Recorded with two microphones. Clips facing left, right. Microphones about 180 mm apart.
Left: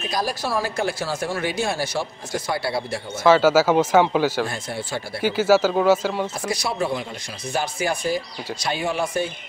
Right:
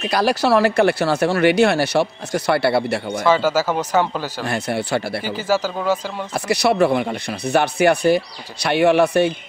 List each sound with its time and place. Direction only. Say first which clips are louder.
0.0 s speech: right 7 dB; 70° right (ahead or behind)
3.3 s speech: left 3 dB; 5° left (ahead or behind)
4.5 s speech: right 8 dB; 70° right (ahead or behind)
5.3 s speech: left 4 dB; 10° left (ahead or behind)
6.3 s speech: right 8 dB; 70° right (ahead or behind)